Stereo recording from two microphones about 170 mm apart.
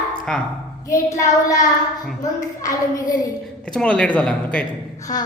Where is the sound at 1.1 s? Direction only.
20° left (ahead or behind).